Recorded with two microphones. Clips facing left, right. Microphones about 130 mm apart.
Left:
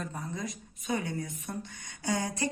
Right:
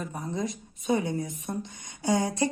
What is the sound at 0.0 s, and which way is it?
A woman's voice, 20° right (ahead or behind).